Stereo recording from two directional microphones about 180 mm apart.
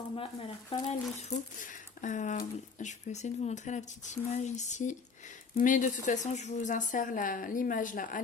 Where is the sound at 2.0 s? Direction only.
45° left (ahead or behind).